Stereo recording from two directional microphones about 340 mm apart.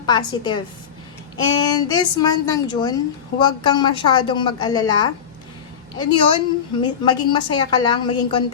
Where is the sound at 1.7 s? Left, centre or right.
Centre.